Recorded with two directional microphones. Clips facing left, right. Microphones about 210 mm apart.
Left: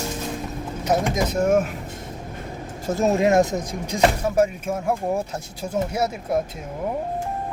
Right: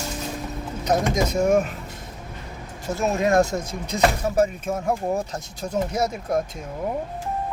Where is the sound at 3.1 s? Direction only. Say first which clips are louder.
Even; 20° left (ahead or behind).